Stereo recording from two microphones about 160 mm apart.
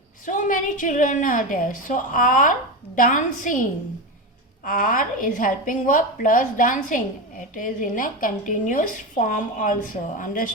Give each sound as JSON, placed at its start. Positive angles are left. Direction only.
{"t": 0.3, "sound": "a woman's voice", "side_deg": 55}